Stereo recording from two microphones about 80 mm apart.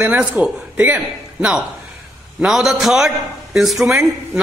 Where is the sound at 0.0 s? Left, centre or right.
Centre.